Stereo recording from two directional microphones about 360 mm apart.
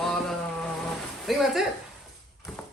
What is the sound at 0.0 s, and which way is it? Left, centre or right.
Boat, centre.